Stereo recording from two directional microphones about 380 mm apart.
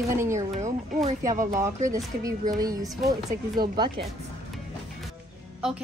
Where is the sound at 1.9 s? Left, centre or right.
Centre.